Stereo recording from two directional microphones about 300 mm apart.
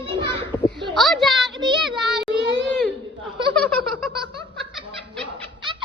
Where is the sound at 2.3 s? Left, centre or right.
Right.